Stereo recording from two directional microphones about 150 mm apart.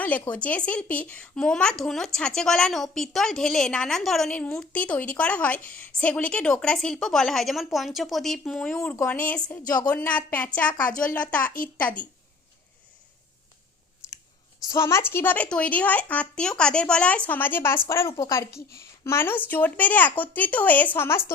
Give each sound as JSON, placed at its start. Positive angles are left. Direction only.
{"t": 0.0, "sound": "a woman's voice", "side_deg": 10}
{"t": 9.6, "sound": "a woman's voice", "side_deg": 25}
{"t": 10.1, "sound": "speech", "side_deg": 10}
{"t": 10.8, "sound": "speech", "side_deg": 65}
{"t": 11.1, "sound": "speech", "side_deg": 10}
{"t": 11.5, "sound": "a woman's voice", "side_deg": 70}
{"t": 14.7, "sound": "speech", "side_deg": 20}